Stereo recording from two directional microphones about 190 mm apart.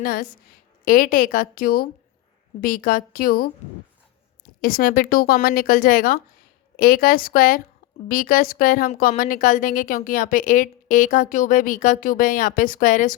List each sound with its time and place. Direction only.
0.0 s a woman's voice: 50° left (ahead or behind)
4.6 s a woman's voice: 50° left (ahead or behind)